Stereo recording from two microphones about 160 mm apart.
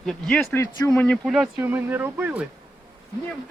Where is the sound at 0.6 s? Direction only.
20° left (ahead or behind).